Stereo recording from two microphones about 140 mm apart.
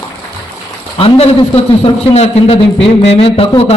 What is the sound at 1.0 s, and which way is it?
Speech, 45° left (ahead or behind).